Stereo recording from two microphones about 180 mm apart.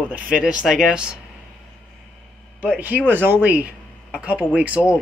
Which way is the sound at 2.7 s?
10° right (ahead or behind).